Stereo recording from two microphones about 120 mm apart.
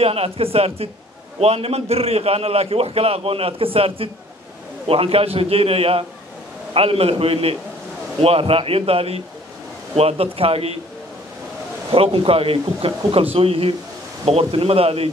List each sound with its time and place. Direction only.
0.0 s a man's voice: 55° right (ahead or behind)
11.9 s a man's voice: 50° right (ahead or behind)